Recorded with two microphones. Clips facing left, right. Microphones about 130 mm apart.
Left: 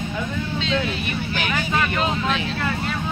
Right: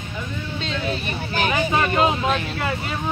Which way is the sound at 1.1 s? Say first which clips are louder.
Right 2 dB; 35° right (ahead or behind).